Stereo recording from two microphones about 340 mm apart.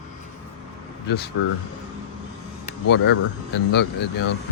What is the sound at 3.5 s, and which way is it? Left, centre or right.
Speech, left.